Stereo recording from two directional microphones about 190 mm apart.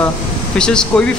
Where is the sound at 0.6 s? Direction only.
5° left (ahead or behind).